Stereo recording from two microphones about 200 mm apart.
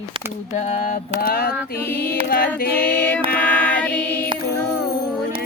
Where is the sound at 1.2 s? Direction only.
50° left (ahead or behind).